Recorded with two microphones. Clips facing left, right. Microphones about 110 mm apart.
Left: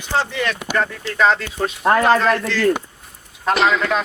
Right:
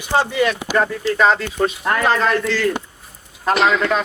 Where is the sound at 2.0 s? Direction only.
Centre (ahead or behind).